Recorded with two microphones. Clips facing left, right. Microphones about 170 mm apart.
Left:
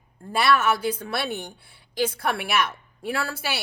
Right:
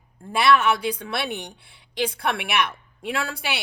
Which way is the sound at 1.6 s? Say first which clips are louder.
Left 1 dB; 65° right (ahead or behind).